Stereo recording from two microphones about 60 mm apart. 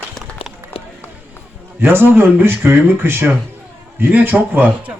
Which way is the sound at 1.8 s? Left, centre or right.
Right.